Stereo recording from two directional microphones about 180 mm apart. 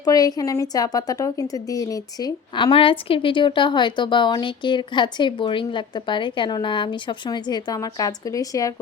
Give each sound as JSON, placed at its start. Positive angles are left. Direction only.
{"t": 0.0, "sound": "a woman's voice", "side_deg": 20}